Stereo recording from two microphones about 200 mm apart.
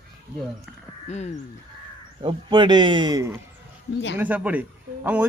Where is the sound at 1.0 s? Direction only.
35° left (ahead or behind).